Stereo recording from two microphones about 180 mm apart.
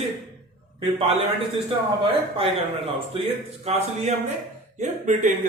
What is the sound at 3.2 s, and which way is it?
Speech, 35° right (ahead or behind).